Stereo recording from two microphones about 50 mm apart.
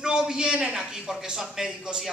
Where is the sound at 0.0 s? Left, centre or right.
Centre.